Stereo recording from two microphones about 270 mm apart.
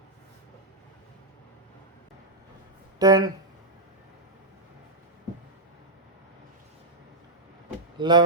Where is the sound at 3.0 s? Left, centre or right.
Centre.